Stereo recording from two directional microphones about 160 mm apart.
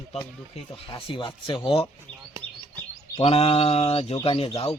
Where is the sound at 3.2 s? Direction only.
40° left (ahead or behind).